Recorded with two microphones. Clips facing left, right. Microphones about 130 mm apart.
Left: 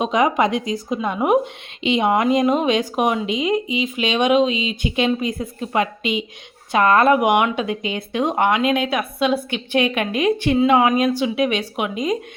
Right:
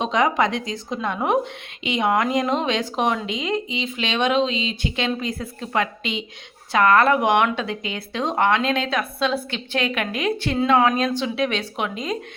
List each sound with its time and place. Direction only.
0.0 s speech: 15° left (ahead or behind)